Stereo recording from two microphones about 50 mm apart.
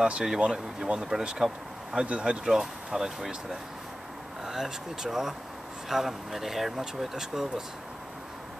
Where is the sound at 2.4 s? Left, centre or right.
Centre.